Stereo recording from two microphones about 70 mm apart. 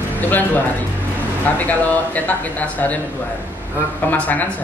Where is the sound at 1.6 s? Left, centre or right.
Left.